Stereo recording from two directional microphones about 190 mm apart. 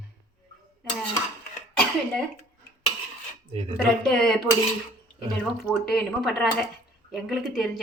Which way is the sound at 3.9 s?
5° left (ahead or behind).